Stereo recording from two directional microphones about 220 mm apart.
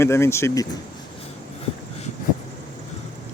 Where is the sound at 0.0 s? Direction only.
10° left (ahead or behind).